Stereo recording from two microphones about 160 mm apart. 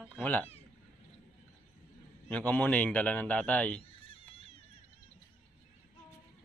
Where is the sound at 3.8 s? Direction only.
35° left (ahead or behind).